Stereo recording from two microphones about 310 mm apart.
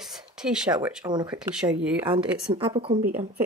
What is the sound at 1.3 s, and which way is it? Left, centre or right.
Speech, centre.